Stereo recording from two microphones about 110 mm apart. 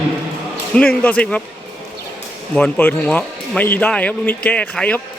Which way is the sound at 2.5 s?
15° left (ahead or behind).